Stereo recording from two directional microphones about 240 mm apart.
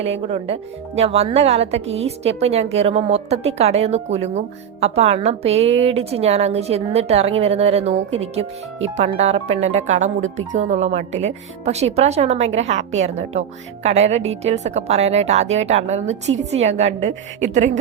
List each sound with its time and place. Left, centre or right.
0.0 s a woman's voice: right